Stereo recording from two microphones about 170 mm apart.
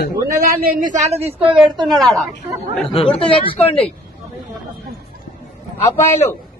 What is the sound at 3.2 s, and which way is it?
Speech, 30° left (ahead or behind).